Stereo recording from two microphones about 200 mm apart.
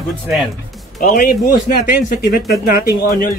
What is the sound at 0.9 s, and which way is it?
Speech, 45° left (ahead or behind).